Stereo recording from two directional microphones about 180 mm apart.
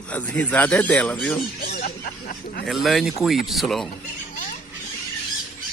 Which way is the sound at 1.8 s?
55° left (ahead or behind).